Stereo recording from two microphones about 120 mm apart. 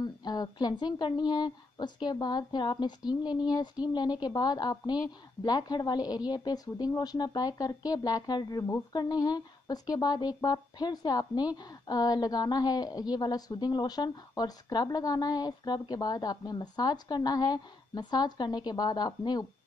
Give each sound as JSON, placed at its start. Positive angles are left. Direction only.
{"t": 0.0, "sound": "speech", "side_deg": 35}